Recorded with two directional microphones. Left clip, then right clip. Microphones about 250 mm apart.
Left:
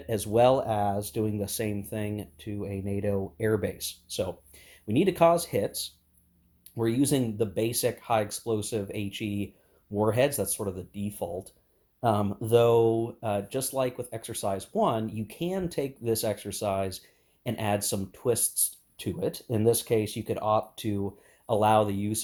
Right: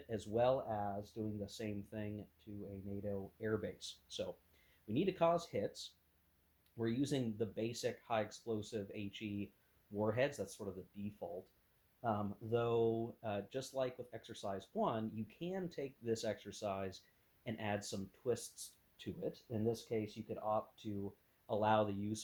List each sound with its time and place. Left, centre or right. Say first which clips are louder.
0.1 s speech: left 13 dB; left
2.4 s speech: left 16 dB; left